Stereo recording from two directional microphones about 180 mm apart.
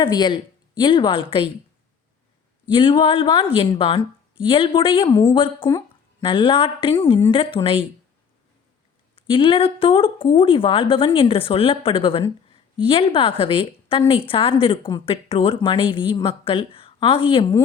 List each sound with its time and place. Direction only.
0.0 s speech: 25° left (ahead or behind)
2.6 s speech: 30° left (ahead or behind)
9.1 s speech: 30° left (ahead or behind)